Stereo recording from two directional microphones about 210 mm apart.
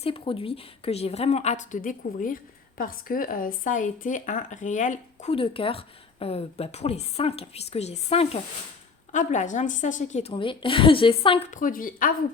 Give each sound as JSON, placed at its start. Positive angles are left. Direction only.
{"t": 0.0, "sound": "a woman's voice", "side_deg": 25}